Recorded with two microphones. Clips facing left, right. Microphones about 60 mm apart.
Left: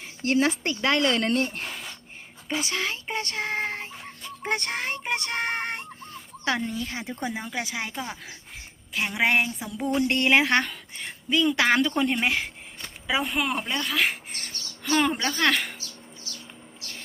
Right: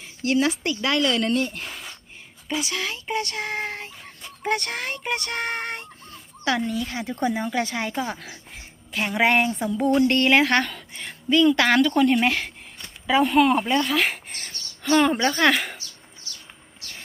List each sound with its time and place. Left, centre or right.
0.0 s speech: left
1.6 s a sound: centre
2.5 s speech: left
4.4 s child singing: left
7.2 s a woman's voice: centre
9.8 s a woman's voice: centre
12.1 s a woman's voice: centre